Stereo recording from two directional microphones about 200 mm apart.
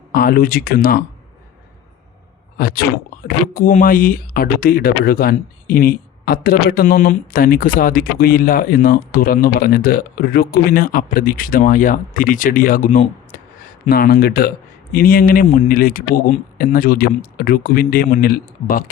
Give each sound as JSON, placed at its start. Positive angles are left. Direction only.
{"t": 0.1, "sound": "speech", "side_deg": 45}
{"t": 2.6, "sound": "speech", "side_deg": 45}